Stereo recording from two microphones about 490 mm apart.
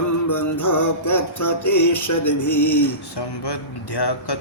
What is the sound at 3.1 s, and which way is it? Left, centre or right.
Speech, left.